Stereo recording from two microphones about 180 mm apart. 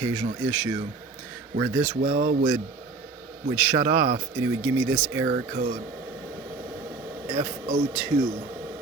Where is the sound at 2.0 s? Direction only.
55° right (ahead or behind).